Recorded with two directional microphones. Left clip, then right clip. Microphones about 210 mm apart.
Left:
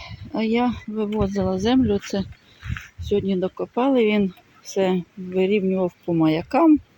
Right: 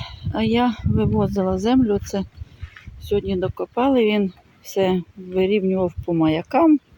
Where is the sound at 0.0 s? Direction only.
5° right (ahead or behind).